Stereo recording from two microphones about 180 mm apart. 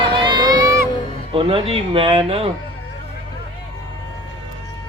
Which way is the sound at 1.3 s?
30° right (ahead or behind).